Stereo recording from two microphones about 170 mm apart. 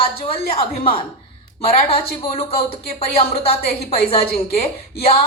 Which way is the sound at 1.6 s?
35° left (ahead or behind).